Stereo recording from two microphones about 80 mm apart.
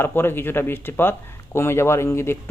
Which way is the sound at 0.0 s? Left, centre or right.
Left.